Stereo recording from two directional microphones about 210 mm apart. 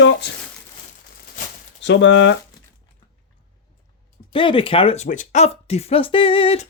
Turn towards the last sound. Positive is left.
turn(degrees=25)  # may be behind; listen again after turning